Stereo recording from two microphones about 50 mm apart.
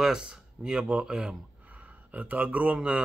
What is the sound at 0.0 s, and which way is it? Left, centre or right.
Speech, centre.